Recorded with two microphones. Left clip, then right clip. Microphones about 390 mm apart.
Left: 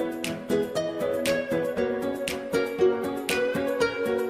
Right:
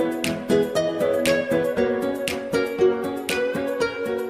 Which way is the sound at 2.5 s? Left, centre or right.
Right.